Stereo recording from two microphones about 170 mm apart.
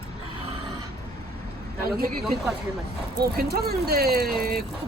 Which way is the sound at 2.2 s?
Centre (ahead or behind).